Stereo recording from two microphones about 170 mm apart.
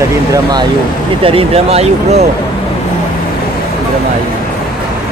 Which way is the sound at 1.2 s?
35° right (ahead or behind).